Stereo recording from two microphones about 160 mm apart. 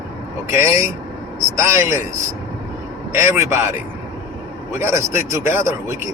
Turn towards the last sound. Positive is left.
turn(degrees=-15)  # may be behind; listen again after turning